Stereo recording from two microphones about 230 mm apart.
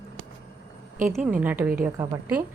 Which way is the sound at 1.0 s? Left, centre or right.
Centre.